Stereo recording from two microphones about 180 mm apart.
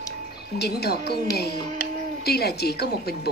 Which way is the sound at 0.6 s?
60° left (ahead or behind).